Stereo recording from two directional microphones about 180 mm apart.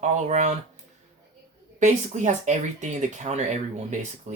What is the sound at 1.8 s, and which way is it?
Speech, 40° right (ahead or behind).